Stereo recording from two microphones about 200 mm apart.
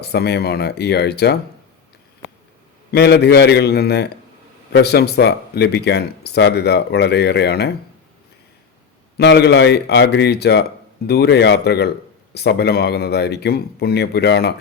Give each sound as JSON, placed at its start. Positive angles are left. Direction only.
{"t": 0.0, "sound": "speech", "side_deg": 55}
{"t": 2.9, "sound": "speech", "side_deg": 55}
{"t": 9.1, "sound": "speech", "side_deg": 60}